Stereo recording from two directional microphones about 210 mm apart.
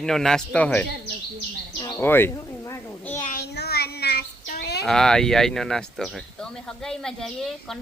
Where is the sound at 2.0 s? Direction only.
10° left (ahead or behind).